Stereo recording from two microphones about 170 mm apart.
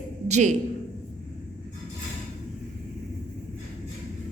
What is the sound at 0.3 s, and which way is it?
Speech, 45° right (ahead or behind).